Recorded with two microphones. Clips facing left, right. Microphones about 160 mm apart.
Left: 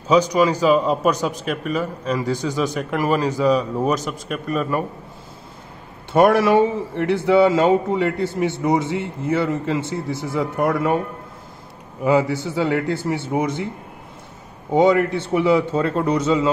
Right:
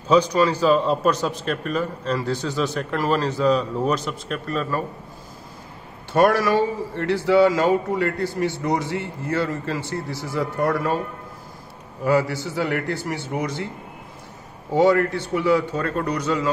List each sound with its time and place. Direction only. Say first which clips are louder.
0.3 s a man's voice: left 2 dB; 10° left (ahead or behind)
6.1 s speech: left 3 dB; 20° left (ahead or behind)
12.0 s speech: left 2 dB; 20° left (ahead or behind)
14.7 s speech: left 2 dB; 20° left (ahead or behind)